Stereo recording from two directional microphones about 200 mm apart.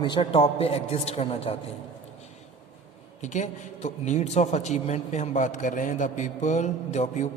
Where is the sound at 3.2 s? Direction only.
35° left (ahead or behind).